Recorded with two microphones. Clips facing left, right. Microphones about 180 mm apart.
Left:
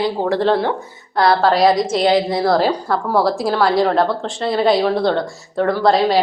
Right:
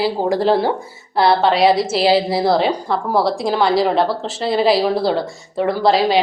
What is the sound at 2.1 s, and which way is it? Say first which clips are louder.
Speech: even; 30° right (ahead or behind).